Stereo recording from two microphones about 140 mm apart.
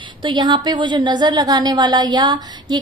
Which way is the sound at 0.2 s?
35° right (ahead or behind).